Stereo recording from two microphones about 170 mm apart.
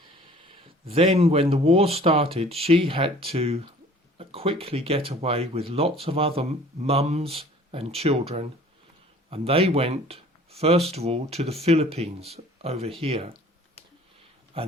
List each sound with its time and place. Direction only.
0.4 s speech: 35° right (ahead or behind)
14.5 s speech: 35° right (ahead or behind)